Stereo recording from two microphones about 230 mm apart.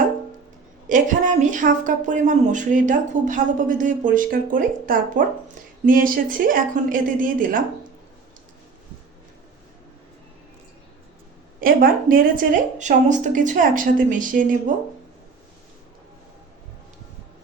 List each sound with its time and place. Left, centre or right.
0.9 s speech: right
11.6 s speech: right